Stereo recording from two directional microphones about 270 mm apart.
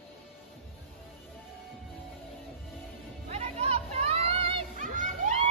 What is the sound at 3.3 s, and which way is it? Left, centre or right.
Children playing, right.